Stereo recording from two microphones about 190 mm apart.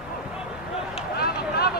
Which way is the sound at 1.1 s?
55° left (ahead or behind).